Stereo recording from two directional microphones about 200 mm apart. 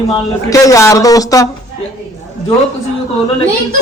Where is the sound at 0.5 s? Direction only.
15° left (ahead or behind).